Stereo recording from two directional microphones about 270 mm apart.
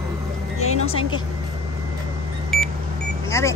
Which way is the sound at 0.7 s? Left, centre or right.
Left.